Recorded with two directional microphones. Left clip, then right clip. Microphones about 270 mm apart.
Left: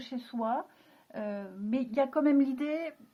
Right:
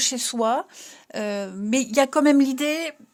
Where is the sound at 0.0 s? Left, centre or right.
Right.